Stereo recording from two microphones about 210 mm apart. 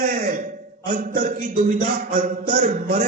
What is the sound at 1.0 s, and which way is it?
A man's voice, 40° right (ahead or behind).